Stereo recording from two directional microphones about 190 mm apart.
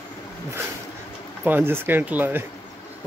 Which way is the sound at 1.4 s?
10° right (ahead or behind).